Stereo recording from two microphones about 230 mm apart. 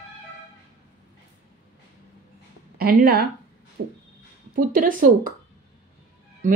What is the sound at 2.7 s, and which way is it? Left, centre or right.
Speech, right.